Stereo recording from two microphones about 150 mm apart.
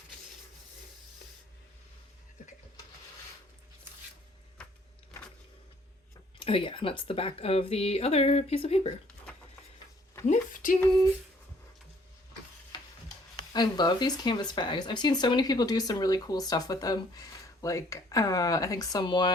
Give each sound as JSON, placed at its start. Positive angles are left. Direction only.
{"t": 6.4, "sound": "speech", "side_deg": 35}
{"t": 10.2, "sound": "a sound", "side_deg": 60}
{"t": 12.7, "sound": "stir", "side_deg": 30}
{"t": 13.5, "sound": "speech", "side_deg": 30}